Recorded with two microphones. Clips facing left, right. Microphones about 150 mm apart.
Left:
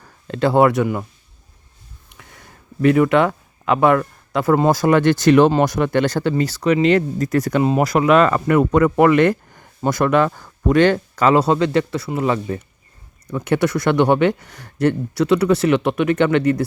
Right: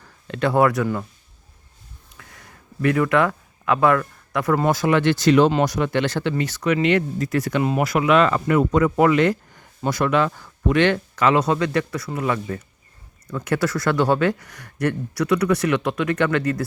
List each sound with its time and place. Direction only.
0.0 s speech: 30° left (ahead or behind)
2.8 s speech: 25° left (ahead or behind); by 7.6 s 40° left (ahead or behind)
7.6 s speech: 25° left (ahead or behind)
7.9 s speech: 40° left (ahead or behind); by 16.6 s 25° left (ahead or behind)